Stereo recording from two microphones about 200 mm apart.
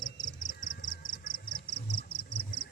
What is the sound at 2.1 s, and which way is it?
Insect, 25° left (ahead or behind).